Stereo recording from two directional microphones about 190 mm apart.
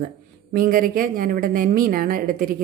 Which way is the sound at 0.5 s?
50° right (ahead or behind).